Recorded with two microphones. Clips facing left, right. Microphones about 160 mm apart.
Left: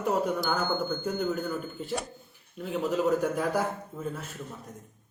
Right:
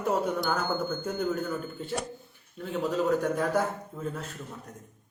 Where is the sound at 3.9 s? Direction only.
5° left (ahead or behind).